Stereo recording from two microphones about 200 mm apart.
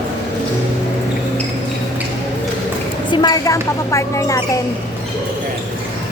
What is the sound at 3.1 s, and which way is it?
Speech, 20° left (ahead or behind).